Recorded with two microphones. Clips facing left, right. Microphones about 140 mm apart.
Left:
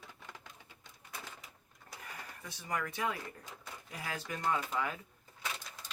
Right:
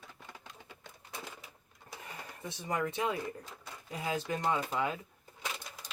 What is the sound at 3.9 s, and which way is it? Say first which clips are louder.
Speech: right 7 dB; 20° right (ahead or behind).